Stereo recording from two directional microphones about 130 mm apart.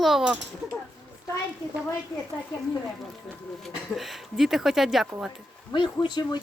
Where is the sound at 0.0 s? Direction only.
Centre (ahead or behind).